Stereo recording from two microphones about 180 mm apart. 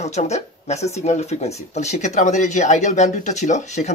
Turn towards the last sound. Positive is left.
turn(degrees=40)  # may be behind; listen again after turning